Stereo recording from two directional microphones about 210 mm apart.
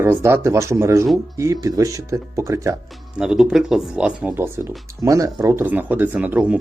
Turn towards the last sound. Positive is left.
turn(degrees=-5)  # may be behind; listen again after turning